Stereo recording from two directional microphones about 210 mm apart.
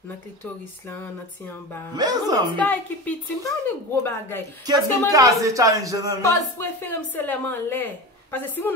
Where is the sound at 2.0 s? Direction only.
20° right (ahead or behind).